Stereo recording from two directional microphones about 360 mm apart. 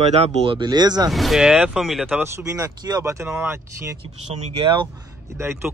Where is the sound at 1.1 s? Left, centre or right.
Centre.